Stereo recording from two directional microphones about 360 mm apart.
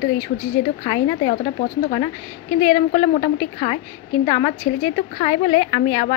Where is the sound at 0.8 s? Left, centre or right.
Centre.